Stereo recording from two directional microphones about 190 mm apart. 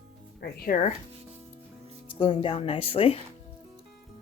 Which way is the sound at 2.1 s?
25° left (ahead or behind).